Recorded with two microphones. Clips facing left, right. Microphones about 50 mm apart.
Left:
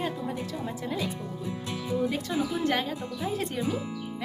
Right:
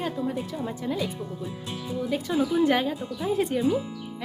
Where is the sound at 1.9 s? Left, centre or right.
Centre.